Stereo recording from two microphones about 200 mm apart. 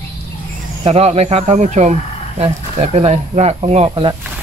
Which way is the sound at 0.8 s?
30° right (ahead or behind).